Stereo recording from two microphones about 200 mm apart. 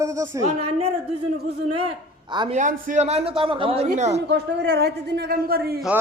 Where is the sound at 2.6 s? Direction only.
40° right (ahead or behind).